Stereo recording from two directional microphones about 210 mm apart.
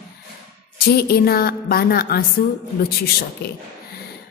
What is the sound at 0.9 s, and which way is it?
A woman's voice, 45° left (ahead or behind).